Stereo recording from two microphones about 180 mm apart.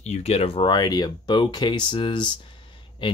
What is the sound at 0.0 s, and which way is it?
Speech, 35° left (ahead or behind).